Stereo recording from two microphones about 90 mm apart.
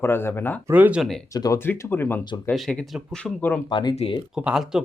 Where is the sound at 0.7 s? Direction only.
15° right (ahead or behind).